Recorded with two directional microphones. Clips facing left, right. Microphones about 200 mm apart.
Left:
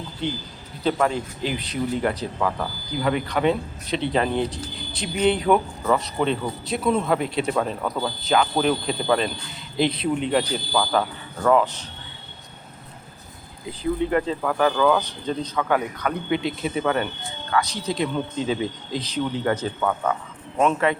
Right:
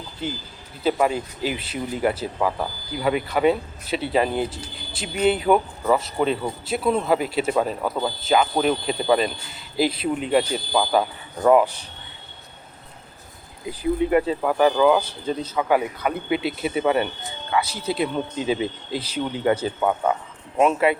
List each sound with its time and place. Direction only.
0.2 s speech: 5° right (ahead or behind)
10.7 s speech: 15° right (ahead or behind)
13.7 s speech: 10° right (ahead or behind)